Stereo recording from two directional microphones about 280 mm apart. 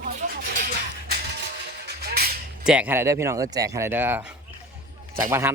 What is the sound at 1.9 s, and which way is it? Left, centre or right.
Music, right.